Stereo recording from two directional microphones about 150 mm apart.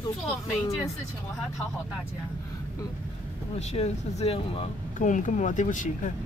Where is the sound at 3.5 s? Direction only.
45° left (ahead or behind).